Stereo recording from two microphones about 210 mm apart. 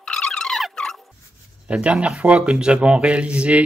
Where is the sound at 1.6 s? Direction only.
5° right (ahead or behind).